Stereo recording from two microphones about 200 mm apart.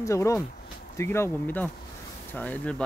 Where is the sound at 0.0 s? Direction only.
15° left (ahead or behind).